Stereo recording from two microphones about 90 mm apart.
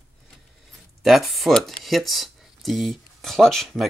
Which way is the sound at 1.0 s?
Centre (ahead or behind).